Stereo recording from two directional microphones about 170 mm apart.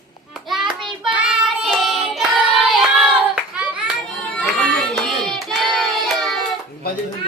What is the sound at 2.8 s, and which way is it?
Hands, 5° right (ahead or behind).